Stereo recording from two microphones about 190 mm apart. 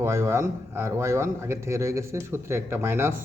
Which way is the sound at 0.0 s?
15° right (ahead or behind).